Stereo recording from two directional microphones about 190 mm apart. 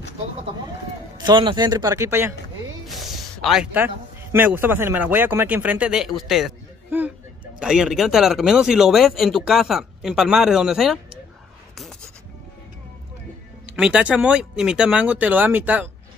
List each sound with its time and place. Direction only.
1.2 s speech: 25° right (ahead or behind)
2.9 s a man's voice: centre (ahead or behind)
13.7 s speech: 5° right (ahead or behind)